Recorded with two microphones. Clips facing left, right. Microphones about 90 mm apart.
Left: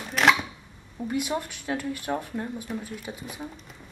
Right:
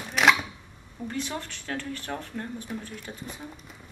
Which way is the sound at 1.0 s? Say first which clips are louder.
Left 5 dB; 10° left (ahead or behind).